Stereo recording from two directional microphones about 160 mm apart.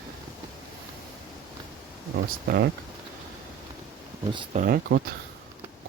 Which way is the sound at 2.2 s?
75° right (ahead or behind).